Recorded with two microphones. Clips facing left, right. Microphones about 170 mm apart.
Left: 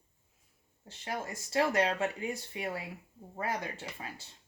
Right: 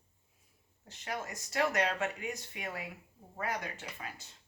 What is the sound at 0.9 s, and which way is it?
Speech, 30° left (ahead or behind).